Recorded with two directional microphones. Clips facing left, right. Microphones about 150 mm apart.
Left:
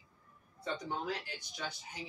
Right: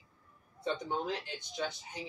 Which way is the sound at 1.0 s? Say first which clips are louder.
Right 2 dB; 20° right (ahead or behind).